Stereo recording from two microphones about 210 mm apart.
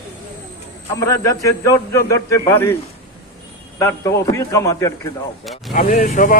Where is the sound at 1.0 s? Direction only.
15° left (ahead or behind).